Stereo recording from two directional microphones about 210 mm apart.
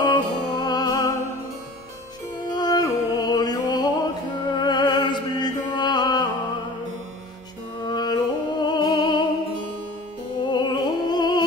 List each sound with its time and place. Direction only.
0.0 s music: 20° left (ahead or behind)
2.5 s music: 20° left (ahead or behind)
7.8 s music: 20° left (ahead or behind)
10.5 s music: 20° left (ahead or behind)